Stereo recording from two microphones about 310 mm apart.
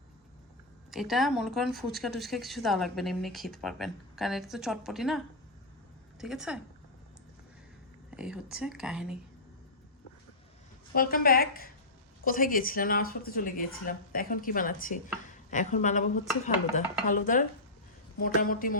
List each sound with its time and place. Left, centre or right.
0.9 s speech: centre
8.1 s speech: centre
10.9 s speech: left